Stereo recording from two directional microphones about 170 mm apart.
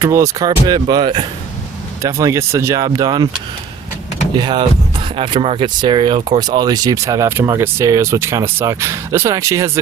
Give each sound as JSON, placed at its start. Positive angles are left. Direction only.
{"t": 0.0, "sound": "speech", "side_deg": -15}
{"t": 4.4, "sound": "speech", "side_deg": -25}